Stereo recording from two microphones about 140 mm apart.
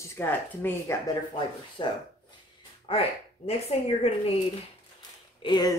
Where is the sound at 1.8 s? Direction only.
35° left (ahead or behind).